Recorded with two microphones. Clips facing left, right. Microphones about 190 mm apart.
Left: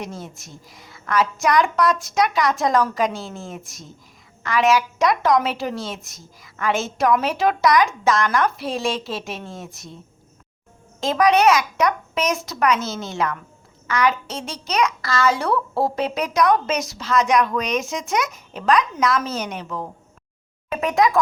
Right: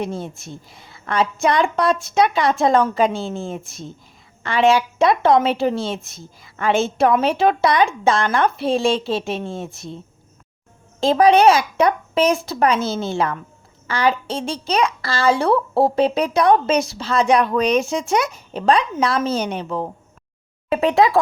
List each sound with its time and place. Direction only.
0.0 s a woman's voice: 25° right (ahead or behind)
11.0 s a woman's voice: 30° right (ahead or behind)